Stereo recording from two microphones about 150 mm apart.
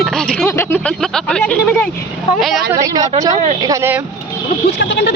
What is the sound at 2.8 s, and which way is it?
Speech, 25° right (ahead or behind).